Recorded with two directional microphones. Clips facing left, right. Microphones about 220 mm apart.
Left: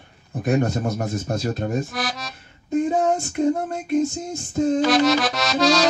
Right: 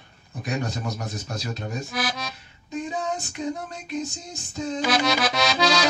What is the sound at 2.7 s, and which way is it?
Female singing, 50° left (ahead or behind).